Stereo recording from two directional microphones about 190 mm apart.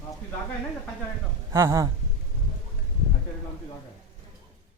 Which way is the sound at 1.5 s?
15° right (ahead or behind).